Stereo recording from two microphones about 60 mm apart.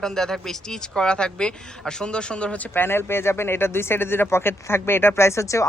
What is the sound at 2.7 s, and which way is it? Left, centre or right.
Speech, left.